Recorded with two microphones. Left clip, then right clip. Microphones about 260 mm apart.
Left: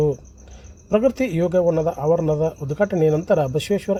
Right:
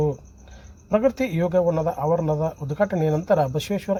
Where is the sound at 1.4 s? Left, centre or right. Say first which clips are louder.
Left 3 dB; centre.